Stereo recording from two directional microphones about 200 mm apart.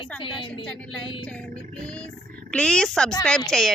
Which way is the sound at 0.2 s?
25° left (ahead or behind).